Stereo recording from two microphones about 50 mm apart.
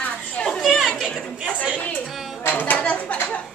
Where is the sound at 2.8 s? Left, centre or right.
Left.